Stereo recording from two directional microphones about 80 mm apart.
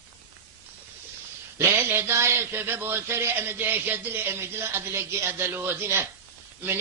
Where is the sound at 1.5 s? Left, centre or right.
Right.